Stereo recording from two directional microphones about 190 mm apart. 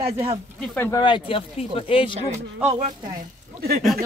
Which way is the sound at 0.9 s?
25° left (ahead or behind).